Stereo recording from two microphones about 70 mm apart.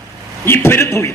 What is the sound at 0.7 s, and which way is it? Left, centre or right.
Speech, left.